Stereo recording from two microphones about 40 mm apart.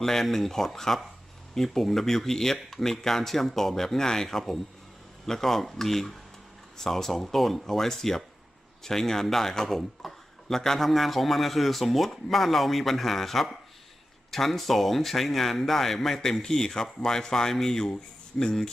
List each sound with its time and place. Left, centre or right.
0.0 s a man's voice: centre